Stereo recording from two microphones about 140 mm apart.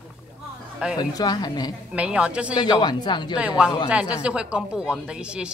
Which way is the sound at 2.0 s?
10° right (ahead or behind).